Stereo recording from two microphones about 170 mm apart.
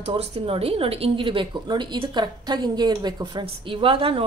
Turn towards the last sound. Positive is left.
turn(degrees=-30)  # may be behind; listen again after turning